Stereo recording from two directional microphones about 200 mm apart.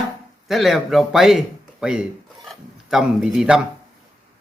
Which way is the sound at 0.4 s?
Centre (ahead or behind).